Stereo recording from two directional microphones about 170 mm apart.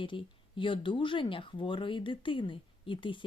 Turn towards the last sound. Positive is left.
turn(degrees=30)  # may be behind; listen again after turning